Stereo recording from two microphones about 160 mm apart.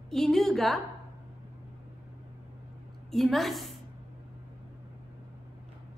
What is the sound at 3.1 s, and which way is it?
Speech, centre (ahead or behind).